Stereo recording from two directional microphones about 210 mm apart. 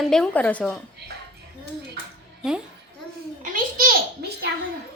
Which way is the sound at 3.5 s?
40° right (ahead or behind).